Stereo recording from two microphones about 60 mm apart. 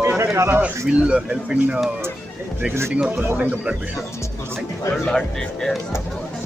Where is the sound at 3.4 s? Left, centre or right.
Right.